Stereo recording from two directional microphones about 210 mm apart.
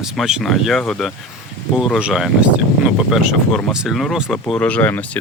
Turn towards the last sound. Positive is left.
turn(degrees=10)  # may be behind; listen again after turning